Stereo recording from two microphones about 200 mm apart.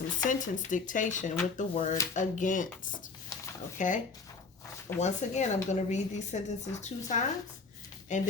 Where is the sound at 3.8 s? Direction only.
40° left (ahead or behind).